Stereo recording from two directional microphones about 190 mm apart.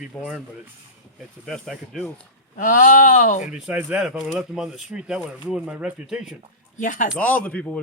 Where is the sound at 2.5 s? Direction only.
45° left (ahead or behind).